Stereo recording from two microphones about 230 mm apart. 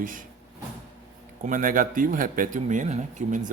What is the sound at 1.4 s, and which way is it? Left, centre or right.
Speech, right.